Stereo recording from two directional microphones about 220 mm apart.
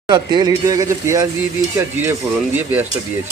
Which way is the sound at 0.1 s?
20° right (ahead or behind).